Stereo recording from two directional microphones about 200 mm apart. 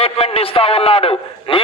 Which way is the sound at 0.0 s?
30° left (ahead or behind).